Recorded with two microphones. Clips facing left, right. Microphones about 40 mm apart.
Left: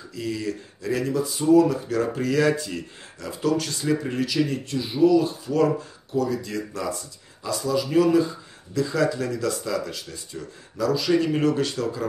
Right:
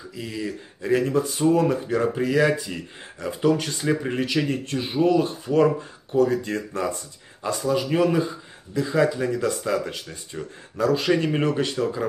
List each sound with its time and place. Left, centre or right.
0.1 s speech: centre
0.8 s speech: right
2.0 s speech: centre
3.2 s speech: right
11.5 s speech: right